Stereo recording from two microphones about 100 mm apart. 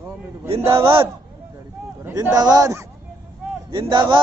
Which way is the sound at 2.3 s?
40° right (ahead or behind).